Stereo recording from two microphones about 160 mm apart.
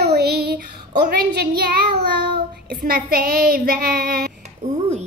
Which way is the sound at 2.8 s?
65° right (ahead or behind).